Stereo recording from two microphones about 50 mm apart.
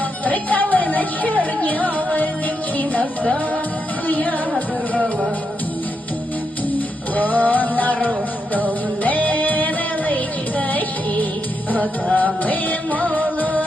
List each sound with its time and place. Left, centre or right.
0.3 s music: left
4.0 s music: left
6.7 s music: left